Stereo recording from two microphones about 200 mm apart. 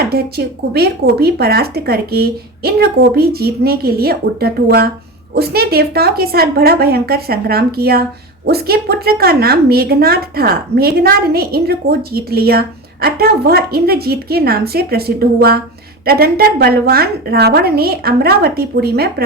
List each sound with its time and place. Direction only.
0.0 s a woman's voice: 50° right (ahead or behind)